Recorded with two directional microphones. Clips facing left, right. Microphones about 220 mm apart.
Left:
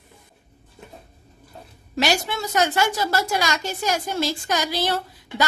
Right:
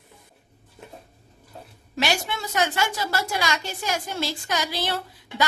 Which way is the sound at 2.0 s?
40° left (ahead or behind).